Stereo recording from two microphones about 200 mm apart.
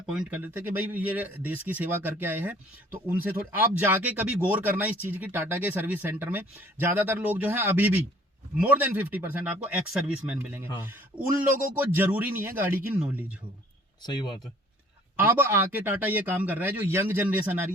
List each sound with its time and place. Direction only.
0.0 s speech: 5° right (ahead or behind)
14.0 s speech: 20° left (ahead or behind)
15.1 s speech: 10° right (ahead or behind)